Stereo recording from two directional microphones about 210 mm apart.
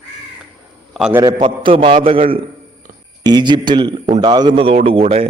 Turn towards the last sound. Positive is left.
turn(degrees=-25)  # may be behind; listen again after turning